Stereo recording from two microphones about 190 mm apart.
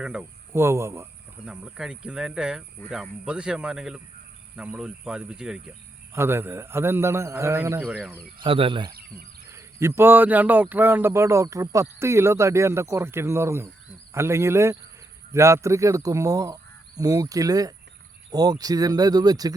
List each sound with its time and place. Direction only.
0.0 s speech: 5° right (ahead or behind)
8.4 s speech: 30° right (ahead or behind)
9.5 s speech: 15° right (ahead or behind)